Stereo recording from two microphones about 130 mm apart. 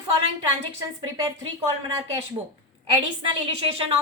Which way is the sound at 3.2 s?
50° right (ahead or behind).